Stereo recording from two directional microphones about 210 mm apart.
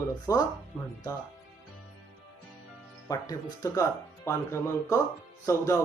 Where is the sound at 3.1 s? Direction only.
15° left (ahead or behind).